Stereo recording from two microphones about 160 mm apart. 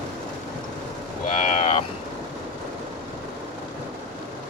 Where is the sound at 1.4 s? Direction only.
50° left (ahead or behind).